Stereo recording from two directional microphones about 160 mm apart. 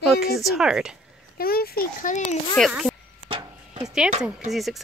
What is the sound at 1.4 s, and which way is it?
Speech, 70° left (ahead or behind).